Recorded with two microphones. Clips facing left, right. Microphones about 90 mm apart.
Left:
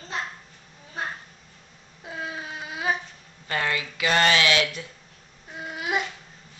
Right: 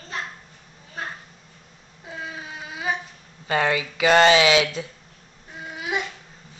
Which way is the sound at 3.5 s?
20° right (ahead or behind).